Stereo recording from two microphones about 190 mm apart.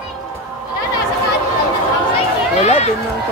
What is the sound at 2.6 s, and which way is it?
Speech, 35° left (ahead or behind).